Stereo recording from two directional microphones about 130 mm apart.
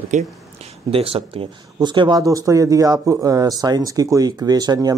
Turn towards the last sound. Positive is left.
turn(degrees=-30)  # may be behind; listen again after turning